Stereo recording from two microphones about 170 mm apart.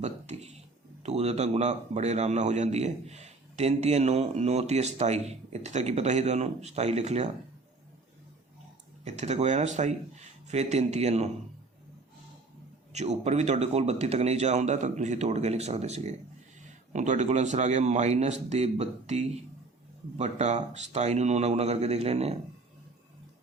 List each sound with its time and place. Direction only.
0.0 s a sound: 40° right (ahead or behind)
1.0 s a man's voice: 40° right (ahead or behind)
9.0 s a man's voice: 40° right (ahead or behind)
12.9 s a man's voice: 40° right (ahead or behind)